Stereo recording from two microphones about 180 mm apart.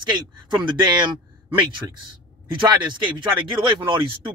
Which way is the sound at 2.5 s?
25° right (ahead or behind).